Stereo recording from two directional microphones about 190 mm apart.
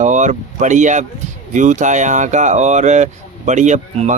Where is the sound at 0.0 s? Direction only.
40° right (ahead or behind).